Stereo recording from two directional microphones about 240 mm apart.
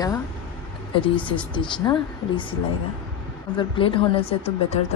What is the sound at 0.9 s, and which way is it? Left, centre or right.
Speech, left.